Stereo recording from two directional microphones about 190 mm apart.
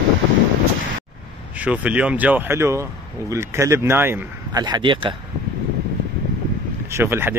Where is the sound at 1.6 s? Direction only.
5° right (ahead or behind); by 5.1 s 25° right (ahead or behind).